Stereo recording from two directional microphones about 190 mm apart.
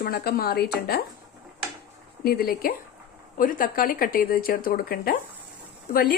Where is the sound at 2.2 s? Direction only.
55° left (ahead or behind).